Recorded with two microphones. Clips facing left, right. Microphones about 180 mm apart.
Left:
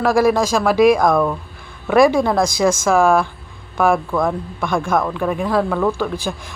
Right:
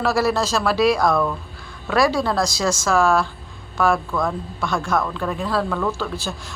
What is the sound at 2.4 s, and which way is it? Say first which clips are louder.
Speech: left 5 dB; 50° left (ahead or behind).